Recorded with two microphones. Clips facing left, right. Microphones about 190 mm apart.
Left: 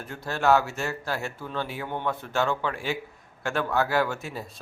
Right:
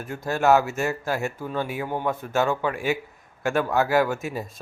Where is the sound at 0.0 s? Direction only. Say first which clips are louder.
Right 3 dB; 15° right (ahead or behind).